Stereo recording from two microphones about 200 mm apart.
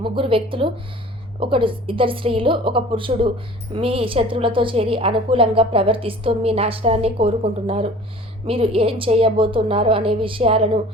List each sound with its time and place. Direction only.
0.0 s a woman's voice: 25° right (ahead or behind)